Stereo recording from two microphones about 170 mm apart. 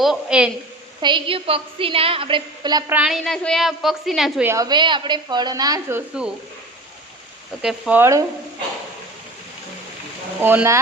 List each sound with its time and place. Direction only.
0.0 s a woman's voice: 5° right (ahead or behind)
1.0 s a woman's voice: 30° right (ahead or behind)
2.9 s a woman's voice: 5° right (ahead or behind)
4.4 s a woman's voice: 20° right (ahead or behind)
7.6 s speech: 5° right (ahead or behind)
10.4 s speech: 15° right (ahead or behind)